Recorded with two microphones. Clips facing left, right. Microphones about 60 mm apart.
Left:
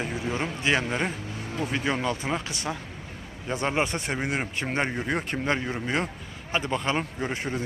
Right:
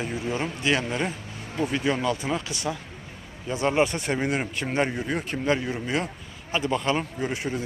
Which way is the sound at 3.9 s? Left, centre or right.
Left.